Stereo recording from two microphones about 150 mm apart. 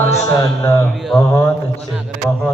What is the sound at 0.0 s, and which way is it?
Music, 20° left (ahead or behind).